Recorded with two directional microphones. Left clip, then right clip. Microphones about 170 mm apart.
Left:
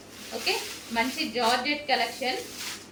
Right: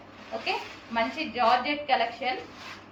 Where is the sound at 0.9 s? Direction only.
15° left (ahead or behind).